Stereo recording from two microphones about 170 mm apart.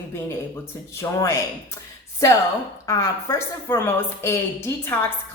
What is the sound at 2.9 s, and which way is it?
A woman's voice, 20° left (ahead or behind).